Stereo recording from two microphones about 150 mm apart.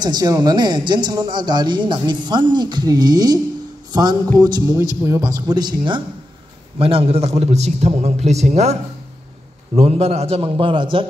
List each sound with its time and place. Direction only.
0.0 s a man's voice: 25° right (ahead or behind); by 8.5 s 45° right (ahead or behind)
9.8 s a man's voice: 40° right (ahead or behind)